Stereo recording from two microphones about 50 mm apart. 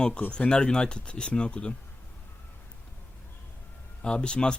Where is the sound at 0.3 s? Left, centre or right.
Centre.